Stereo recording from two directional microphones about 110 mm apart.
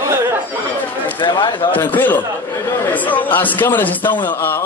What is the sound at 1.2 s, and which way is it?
Speech, 45° left (ahead or behind).